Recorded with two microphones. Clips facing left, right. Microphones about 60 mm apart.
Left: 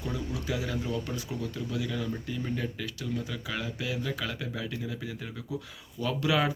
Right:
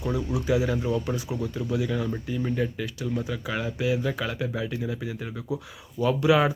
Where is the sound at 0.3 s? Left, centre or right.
Centre.